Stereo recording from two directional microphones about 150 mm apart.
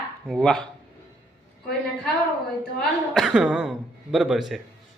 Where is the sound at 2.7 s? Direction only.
Centre (ahead or behind).